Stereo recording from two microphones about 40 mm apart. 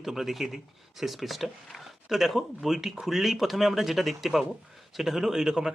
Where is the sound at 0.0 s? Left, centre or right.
Centre.